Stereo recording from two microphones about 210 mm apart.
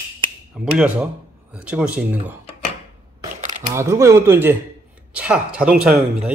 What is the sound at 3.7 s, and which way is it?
Speech, 15° right (ahead or behind).